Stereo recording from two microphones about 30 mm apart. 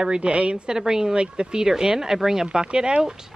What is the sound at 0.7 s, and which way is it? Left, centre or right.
Speech, right.